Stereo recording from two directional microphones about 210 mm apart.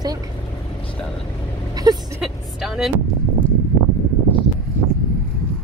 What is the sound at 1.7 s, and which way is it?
Vehicle, 20° right (ahead or behind).